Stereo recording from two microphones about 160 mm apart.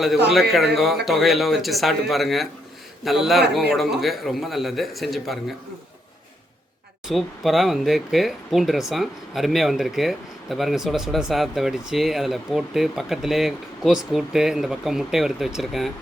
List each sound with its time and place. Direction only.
0.8 s speech: centre (ahead or behind)
7.1 s speech: centre (ahead or behind)